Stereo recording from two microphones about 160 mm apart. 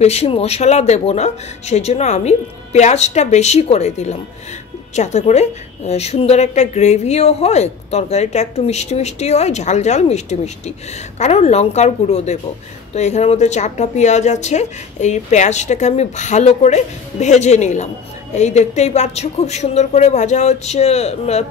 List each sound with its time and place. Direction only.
0.0 s a woman's voice: 40° left (ahead or behind)